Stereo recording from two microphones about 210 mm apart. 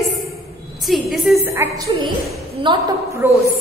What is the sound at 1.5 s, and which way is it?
A woman's voice, 15° right (ahead or behind).